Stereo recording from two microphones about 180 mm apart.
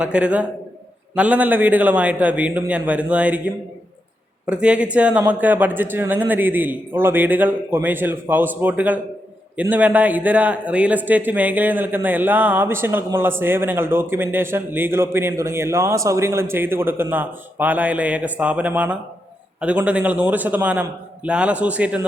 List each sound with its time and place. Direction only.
0.0 s a man's voice: 5° right (ahead or behind)